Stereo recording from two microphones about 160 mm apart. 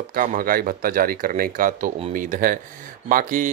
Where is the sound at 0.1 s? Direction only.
60° right (ahead or behind).